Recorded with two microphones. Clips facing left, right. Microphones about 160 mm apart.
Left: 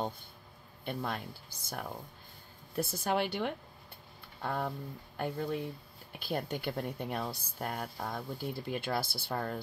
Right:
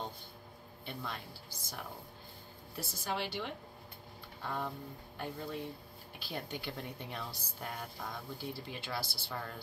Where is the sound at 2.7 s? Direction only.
55° left (ahead or behind).